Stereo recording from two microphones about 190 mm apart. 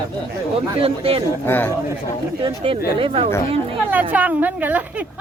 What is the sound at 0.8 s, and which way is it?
Speech, 30° right (ahead or behind).